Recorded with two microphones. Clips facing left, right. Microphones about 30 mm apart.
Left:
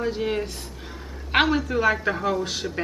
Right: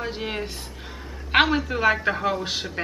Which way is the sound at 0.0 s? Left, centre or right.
Centre.